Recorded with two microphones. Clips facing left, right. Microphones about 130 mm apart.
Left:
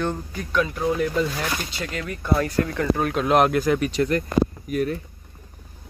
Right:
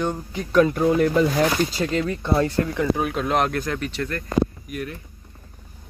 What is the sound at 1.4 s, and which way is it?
Speech, 30° right (ahead or behind).